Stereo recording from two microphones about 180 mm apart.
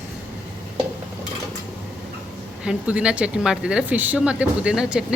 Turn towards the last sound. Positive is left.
turn(degrees=-5)  # may be behind; listen again after turning